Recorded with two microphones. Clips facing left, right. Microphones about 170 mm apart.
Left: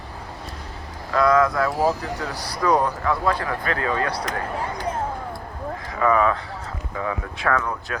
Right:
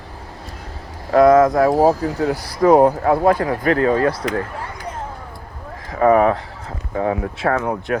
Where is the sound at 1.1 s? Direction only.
50° right (ahead or behind).